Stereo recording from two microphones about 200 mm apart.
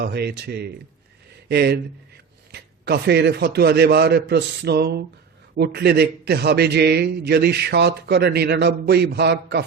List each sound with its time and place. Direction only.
0.0 s a man's voice: 55° right (ahead or behind)